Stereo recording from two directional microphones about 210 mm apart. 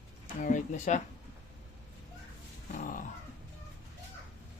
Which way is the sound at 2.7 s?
40° left (ahead or behind).